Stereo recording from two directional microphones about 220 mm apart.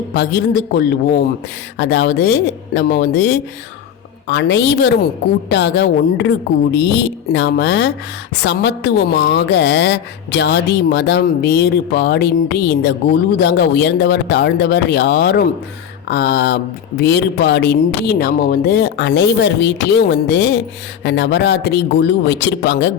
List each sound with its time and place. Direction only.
0.1 s a woman's voice: 45° left (ahead or behind)